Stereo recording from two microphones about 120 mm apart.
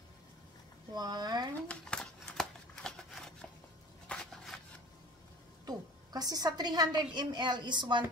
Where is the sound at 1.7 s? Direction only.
5° left (ahead or behind).